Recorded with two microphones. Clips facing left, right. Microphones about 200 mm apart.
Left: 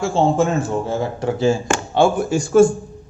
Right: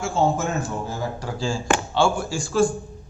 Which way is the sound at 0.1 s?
30° left (ahead or behind).